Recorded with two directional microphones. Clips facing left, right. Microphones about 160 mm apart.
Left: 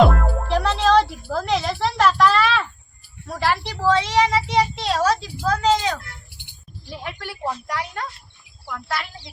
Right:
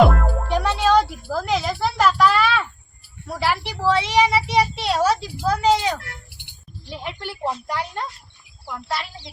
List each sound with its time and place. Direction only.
0.0 s music: centre (ahead or behind)
3.2 s speech: 10° right (ahead or behind)
6.9 s a child's voice: 15° right (ahead or behind)